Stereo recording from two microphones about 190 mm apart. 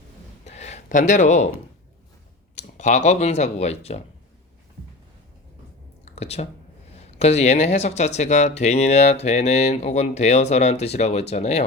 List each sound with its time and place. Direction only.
0.4 s a sound: 35° left (ahead or behind)
2.6 s speech: 40° left (ahead or behind)
6.1 s speech: 35° left (ahead or behind)